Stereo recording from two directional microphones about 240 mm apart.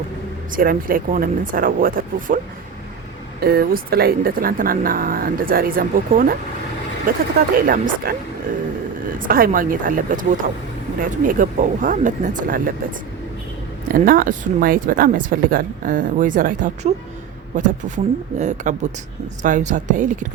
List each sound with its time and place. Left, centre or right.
0.5 s speech: right
3.4 s speech: right
13.8 s speech: right